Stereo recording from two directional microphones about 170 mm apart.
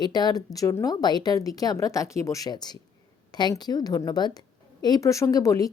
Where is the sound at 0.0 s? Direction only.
25° left (ahead or behind).